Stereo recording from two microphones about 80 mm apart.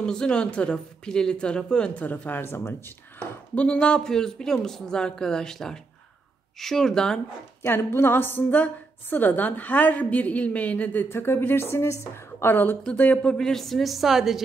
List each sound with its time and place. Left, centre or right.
0.0 s speech: centre; by 2.7 s left
3.2 s a woman's voice: centre
7.6 s a woman's voice: left
13.3 s a woman's voice: centre